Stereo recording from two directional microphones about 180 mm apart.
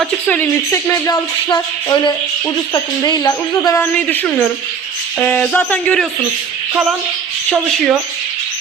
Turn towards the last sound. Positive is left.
turn(degrees=5)  # may be behind; listen again after turning